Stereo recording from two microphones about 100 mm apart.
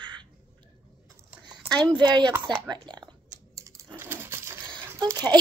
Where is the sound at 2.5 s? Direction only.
50° right (ahead or behind).